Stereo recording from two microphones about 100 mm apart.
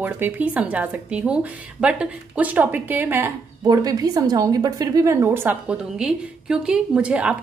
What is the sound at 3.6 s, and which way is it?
A woman's voice, 40° right (ahead or behind).